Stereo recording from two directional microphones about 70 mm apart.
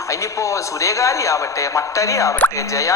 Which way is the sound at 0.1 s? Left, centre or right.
Left.